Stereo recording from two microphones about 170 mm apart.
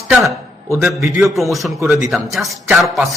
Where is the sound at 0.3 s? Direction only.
15° right (ahead or behind).